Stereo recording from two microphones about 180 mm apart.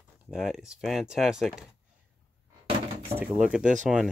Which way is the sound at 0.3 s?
5° right (ahead or behind).